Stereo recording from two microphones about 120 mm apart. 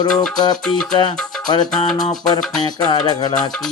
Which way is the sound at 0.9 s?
40° left (ahead or behind).